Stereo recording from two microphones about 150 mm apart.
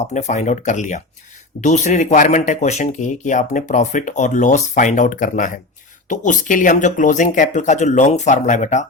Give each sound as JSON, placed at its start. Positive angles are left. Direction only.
{"t": 0.0, "sound": "speech", "side_deg": 50}